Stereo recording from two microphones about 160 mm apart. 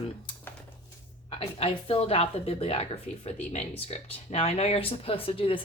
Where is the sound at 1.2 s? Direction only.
35° left (ahead or behind).